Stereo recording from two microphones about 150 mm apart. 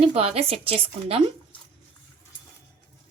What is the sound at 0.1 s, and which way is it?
Speech, 40° right (ahead or behind).